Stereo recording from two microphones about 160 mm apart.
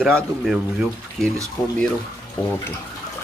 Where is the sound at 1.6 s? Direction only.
20° left (ahead or behind).